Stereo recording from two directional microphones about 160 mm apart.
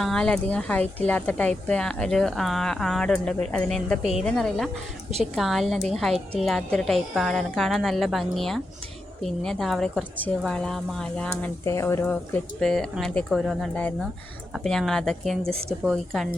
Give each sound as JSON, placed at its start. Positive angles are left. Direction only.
{"t": 0.0, "sound": "speech", "side_deg": 5}
{"t": 11.6, "sound": "speech", "side_deg": 20}
{"t": 12.0, "sound": "speech", "side_deg": 10}